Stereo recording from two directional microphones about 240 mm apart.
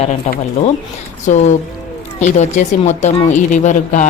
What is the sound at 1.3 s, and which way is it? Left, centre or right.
Speech, left.